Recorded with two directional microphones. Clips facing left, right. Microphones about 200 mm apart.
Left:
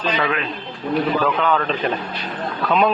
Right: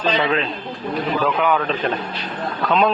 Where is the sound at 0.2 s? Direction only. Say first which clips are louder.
Right 2 dB; 25° right (ahead or behind).